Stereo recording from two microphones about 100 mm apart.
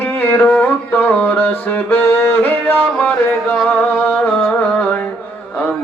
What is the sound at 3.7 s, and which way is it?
Music, 15° left (ahead or behind).